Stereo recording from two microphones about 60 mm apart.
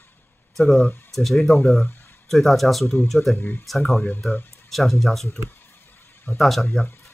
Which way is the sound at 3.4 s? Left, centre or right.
Left.